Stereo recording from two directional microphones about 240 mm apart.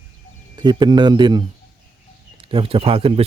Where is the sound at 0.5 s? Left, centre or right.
Centre.